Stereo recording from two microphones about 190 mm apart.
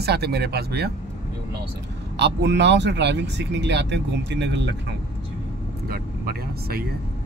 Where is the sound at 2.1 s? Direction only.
65° right (ahead or behind).